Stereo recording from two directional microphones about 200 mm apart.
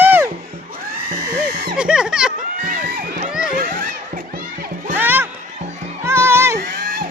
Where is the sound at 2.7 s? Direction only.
45° right (ahead or behind).